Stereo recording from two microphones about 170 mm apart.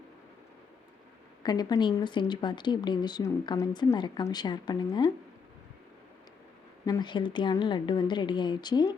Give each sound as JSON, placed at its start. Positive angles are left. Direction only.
{"t": 1.4, "sound": "a woman's voice", "side_deg": 25}
{"t": 6.8, "sound": "speech", "side_deg": 25}